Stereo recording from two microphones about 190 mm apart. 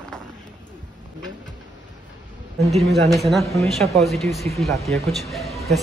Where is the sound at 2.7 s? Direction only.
Centre (ahead or behind).